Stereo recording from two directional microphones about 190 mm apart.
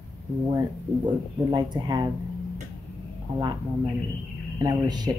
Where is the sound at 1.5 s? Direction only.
20° right (ahead or behind).